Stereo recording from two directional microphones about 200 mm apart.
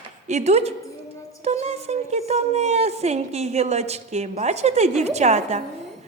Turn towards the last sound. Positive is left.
turn(degrees=-35)  # may be behind; listen again after turning